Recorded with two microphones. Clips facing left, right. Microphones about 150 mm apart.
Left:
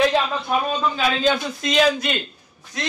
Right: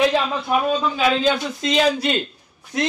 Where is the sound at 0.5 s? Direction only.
5° right (ahead or behind).